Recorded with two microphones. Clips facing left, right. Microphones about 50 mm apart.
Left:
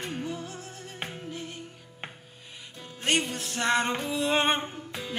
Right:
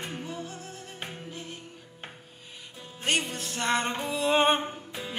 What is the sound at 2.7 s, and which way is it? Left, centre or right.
Music, centre.